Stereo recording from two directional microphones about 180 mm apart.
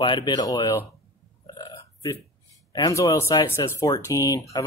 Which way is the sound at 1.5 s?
20° left (ahead or behind).